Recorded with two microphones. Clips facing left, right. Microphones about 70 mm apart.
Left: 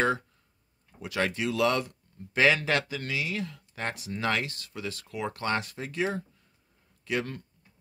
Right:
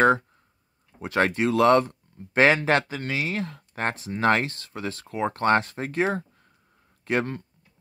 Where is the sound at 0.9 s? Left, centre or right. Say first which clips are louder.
Right 6 dB; right.